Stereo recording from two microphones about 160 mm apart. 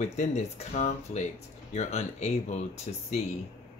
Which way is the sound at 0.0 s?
45° left (ahead or behind).